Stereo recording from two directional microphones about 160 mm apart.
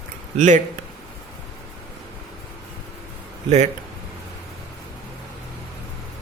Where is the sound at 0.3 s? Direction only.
50° right (ahead or behind).